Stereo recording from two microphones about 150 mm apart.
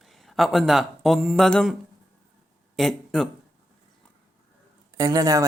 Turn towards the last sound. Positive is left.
turn(degrees=-20)  # may be behind; listen again after turning